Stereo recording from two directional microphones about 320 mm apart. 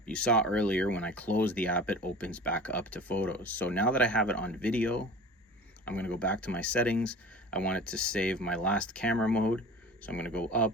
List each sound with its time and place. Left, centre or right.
0.0 s speech: centre